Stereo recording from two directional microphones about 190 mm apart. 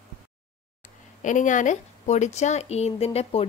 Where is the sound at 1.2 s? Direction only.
40° left (ahead or behind).